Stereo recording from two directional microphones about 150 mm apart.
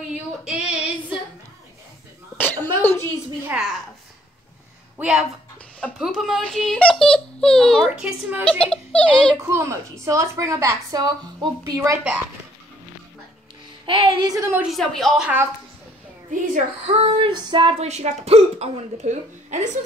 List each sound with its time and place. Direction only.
0.5 s female singing: 5° right (ahead or behind)
2.3 s cough: 10° left (ahead or behind)
4.9 s a woman's voice: 5° right (ahead or behind)
8.5 s a child's voice: 5° left (ahead or behind)
9.4 s a woman's voice: 20° right (ahead or behind)
13.8 s speech: 35° right (ahead or behind)
14.3 s a woman's voice: 20° right (ahead or behind)
14.6 s speech: centre (ahead or behind)
16.3 s speech: 50° right (ahead or behind)